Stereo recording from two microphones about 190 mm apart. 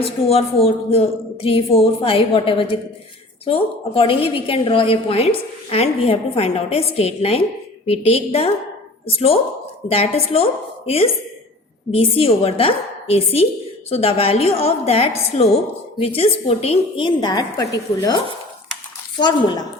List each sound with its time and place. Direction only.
0.0 s a woman's voice: 30° left (ahead or behind)